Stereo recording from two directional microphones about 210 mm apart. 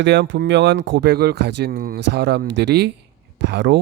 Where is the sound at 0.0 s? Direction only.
55° right (ahead or behind).